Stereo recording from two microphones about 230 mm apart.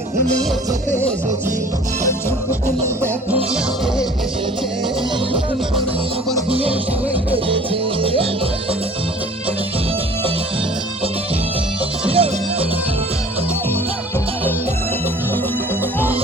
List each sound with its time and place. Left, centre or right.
6.5 s music: right
12.1 s music: right